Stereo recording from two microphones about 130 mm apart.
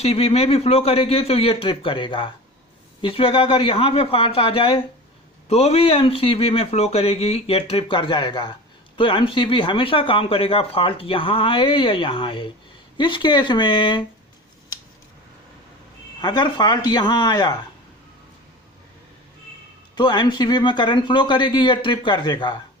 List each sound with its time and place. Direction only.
0.0 s speech: 50° left (ahead or behind)
16.2 s speech: 35° left (ahead or behind)
20.0 s speech: 35° left (ahead or behind)